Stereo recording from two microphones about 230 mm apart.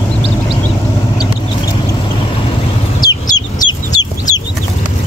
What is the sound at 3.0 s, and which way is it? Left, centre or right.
Chicken, centre.